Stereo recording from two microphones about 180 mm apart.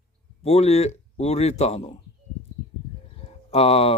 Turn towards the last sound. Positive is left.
turn(degrees=35)  # may be behind; listen again after turning